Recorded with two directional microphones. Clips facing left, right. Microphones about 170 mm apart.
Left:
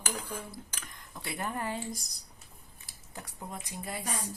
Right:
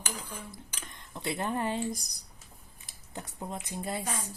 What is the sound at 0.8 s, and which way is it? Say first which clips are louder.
Speech: right 4 dB; 20° right (ahead or behind).